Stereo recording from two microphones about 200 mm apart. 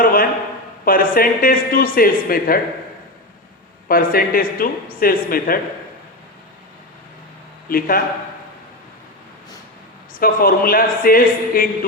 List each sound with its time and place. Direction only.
0.0 s a sound: 45° left (ahead or behind)
0.9 s speech: 45° left (ahead or behind)
3.8 s speech: 45° left (ahead or behind)
7.7 s speech: 45° left (ahead or behind)
10.2 s speech: 45° left (ahead or behind)